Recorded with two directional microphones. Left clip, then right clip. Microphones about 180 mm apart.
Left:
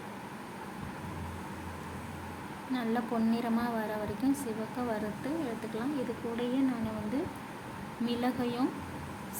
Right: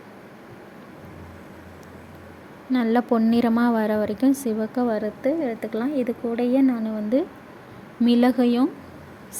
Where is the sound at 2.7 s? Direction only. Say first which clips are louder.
Right 12 dB; 45° right (ahead or behind).